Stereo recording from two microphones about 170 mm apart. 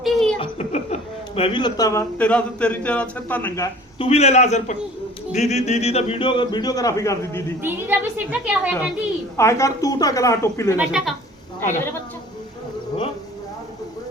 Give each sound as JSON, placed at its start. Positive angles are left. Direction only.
{"t": 0.0, "sound": "chuckle", "side_deg": 0}
{"t": 0.3, "sound": "speech", "side_deg": 40}
{"t": 3.9, "sound": "a man's voice", "side_deg": 35}
{"t": 7.6, "sound": "a woman's voice", "side_deg": -10}
{"t": 9.4, "sound": "a woman's voice", "side_deg": 15}
{"t": 10.8, "sound": "speech", "side_deg": -5}